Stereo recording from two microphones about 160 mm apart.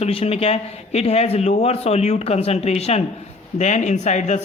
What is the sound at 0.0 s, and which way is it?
Speech, 40° left (ahead or behind).